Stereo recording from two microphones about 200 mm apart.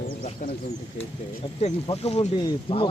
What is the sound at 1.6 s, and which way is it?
Speech, 30° left (ahead or behind).